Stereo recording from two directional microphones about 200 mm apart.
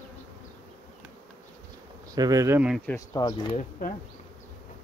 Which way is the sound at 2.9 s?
15° left (ahead or behind).